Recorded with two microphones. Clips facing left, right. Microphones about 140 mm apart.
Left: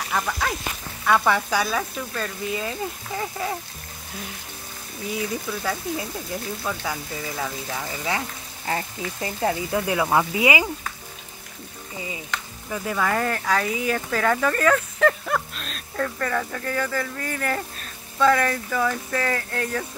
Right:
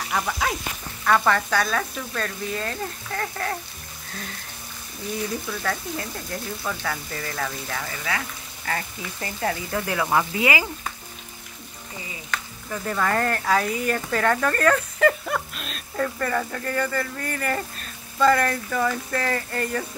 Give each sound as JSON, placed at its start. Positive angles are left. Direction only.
{"t": 0.1, "sound": "speech", "side_deg": 0}
{"t": 5.1, "sound": "speech", "side_deg": 5}
{"t": 12.3, "sound": "speech", "side_deg": 10}